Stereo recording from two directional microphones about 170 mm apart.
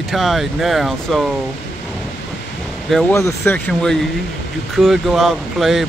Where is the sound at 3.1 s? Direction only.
15° left (ahead or behind).